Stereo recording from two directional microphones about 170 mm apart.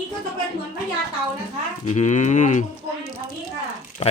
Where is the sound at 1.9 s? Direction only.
45° left (ahead or behind).